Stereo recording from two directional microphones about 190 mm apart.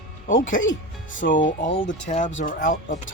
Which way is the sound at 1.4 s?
45° left (ahead or behind).